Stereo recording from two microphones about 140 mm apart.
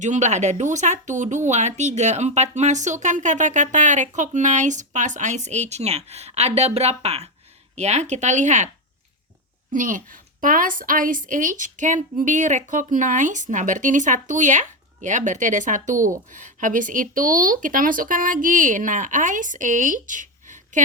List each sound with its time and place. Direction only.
0.0 s speech: 55° right (ahead or behind)
9.7 s speech: 70° right (ahead or behind)